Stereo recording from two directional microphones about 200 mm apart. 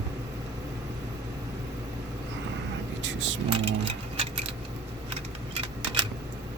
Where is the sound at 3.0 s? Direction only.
65° right (ahead or behind).